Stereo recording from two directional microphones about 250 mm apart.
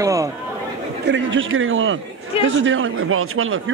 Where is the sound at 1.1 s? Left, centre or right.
Right.